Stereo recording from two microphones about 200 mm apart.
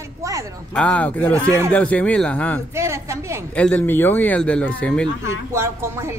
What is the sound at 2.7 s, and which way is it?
Speech, 15° right (ahead or behind).